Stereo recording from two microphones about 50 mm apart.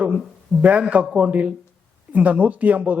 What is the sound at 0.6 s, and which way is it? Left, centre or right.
A man's voice, right.